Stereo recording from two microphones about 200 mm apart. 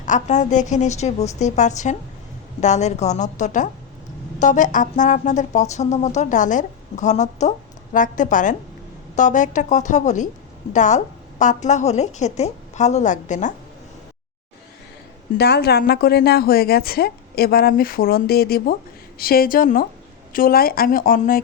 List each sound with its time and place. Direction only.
0.0 s speech: 35° left (ahead or behind)
15.4 s a woman's voice: 55° left (ahead or behind)